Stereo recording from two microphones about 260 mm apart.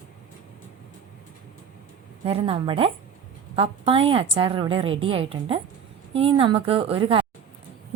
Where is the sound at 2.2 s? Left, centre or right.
Right.